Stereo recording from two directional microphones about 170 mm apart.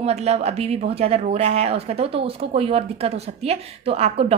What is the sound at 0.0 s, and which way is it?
Speech, 40° right (ahead or behind).